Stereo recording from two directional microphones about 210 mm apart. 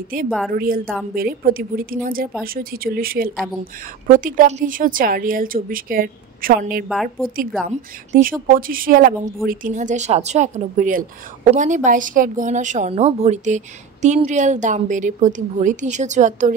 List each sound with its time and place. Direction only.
0.5 s speech: 45° right (ahead or behind)
6.9 s a woman's voice: centre (ahead or behind)
7.6 s speech: 40° right (ahead or behind)